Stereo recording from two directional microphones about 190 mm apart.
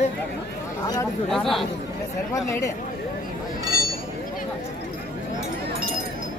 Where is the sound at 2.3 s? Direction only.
15° left (ahead or behind).